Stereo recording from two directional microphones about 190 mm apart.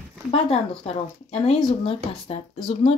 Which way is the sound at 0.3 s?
30° left (ahead or behind).